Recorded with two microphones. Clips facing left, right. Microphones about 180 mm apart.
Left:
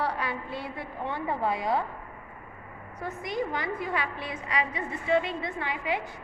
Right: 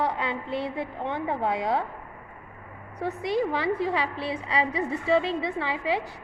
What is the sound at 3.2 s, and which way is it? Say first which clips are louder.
A woman's voice: right 6 dB; 30° right (ahead or behind).